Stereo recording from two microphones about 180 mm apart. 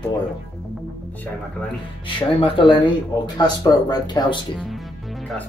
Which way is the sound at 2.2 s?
30° left (ahead or behind).